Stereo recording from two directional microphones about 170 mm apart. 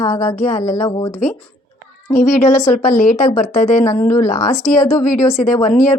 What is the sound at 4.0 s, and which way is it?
Speech, 15° left (ahead or behind).